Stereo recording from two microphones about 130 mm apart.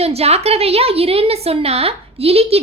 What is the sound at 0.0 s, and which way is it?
A woman's voice, 50° right (ahead or behind).